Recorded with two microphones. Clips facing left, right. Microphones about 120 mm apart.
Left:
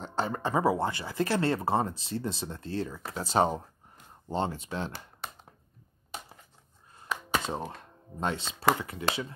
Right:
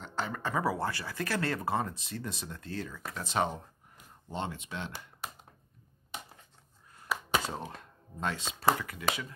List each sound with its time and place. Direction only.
0.0 s speech: 30° left (ahead or behind)
7.1 s a sound: 5° right (ahead or behind)
7.4 s speech: 25° left (ahead or behind)